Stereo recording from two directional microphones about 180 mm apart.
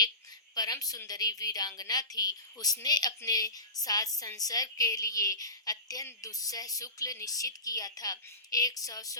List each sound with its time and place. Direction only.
0.5 s a woman's voice: 20° left (ahead or behind)